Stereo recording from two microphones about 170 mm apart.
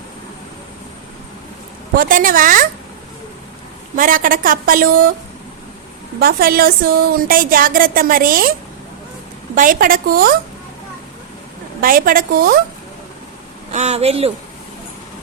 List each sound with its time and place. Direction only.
2.0 s a woman's voice: 55° right (ahead or behind)
3.9 s a woman's voice: 55° right (ahead or behind)
6.1 s a woman's voice: 60° right (ahead or behind)
9.6 s a woman's voice: 55° right (ahead or behind)
11.8 s a woman's voice: 55° right (ahead or behind)
13.7 s speech: 40° right (ahead or behind)